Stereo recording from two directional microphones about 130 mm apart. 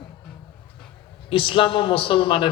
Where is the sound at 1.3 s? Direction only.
40° left (ahead or behind).